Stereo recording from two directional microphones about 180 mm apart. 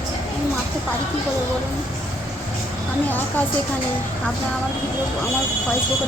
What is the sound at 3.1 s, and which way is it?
Speech, 10° left (ahead or behind).